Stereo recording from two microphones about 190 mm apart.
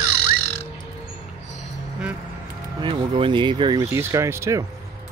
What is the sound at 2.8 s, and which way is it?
Speech, 25° right (ahead or behind).